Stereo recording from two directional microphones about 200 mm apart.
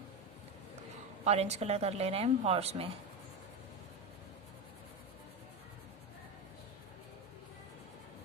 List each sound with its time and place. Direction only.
1.2 s a woman's voice: 30° right (ahead or behind)